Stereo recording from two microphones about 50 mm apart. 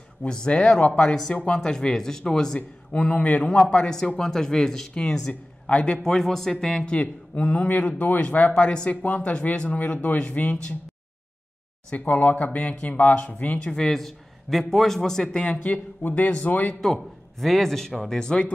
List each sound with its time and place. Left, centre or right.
0.2 s a man's voice: centre
6.0 s a man's voice: centre; by 10.8 s left
11.9 s a man's voice: left
13.7 s a man's voice: centre
15.2 s speech: left
16.8 s a man's voice: centre